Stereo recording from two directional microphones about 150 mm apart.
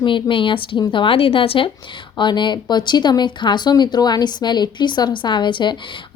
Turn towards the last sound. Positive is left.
turn(degrees=30)  # may be behind; listen again after turning